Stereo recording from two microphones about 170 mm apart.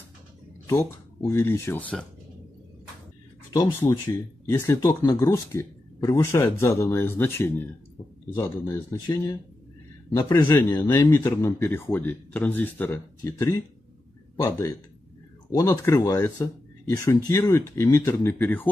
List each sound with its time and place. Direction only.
0.7 s speech: 15° left (ahead or behind)
3.8 s speech: 15° left (ahead or behind)